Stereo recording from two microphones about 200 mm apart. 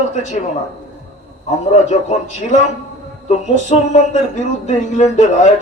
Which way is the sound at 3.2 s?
35° left (ahead or behind).